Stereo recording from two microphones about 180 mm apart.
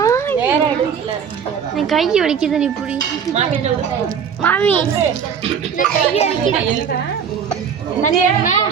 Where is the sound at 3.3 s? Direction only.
35° right (ahead or behind).